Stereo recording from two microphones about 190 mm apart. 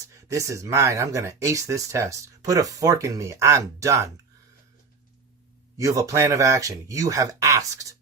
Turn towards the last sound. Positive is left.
turn(degrees=-15)  # may be behind; listen again after turning